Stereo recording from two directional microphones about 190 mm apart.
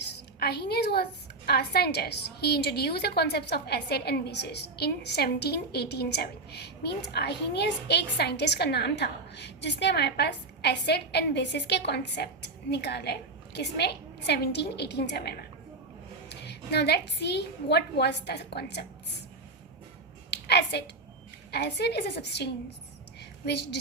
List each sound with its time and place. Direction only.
0.3 s a woman's voice: 60° left (ahead or behind)
20.3 s a woman's voice: 65° left (ahead or behind)